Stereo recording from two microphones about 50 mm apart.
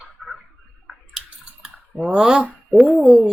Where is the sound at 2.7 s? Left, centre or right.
Centre.